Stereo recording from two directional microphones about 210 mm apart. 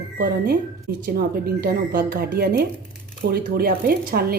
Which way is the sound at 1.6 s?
40° right (ahead or behind).